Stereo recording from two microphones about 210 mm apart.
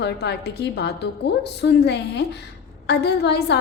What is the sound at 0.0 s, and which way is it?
A woman's voice, 50° left (ahead or behind).